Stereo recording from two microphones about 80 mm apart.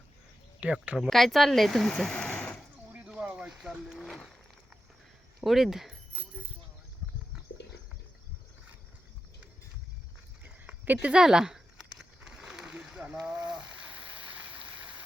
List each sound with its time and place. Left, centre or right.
0.6 s speech: centre
0.9 s speech: centre
2.9 s a sound: centre
5.4 s speech: centre
10.8 s speech: right
11.1 s a sound: centre